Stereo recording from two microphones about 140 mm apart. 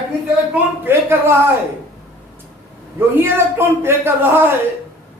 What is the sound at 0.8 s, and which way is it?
Speech, 15° right (ahead or behind).